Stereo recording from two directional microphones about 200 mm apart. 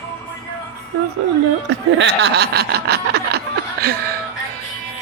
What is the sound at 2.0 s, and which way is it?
Snicker, 60° right (ahead or behind).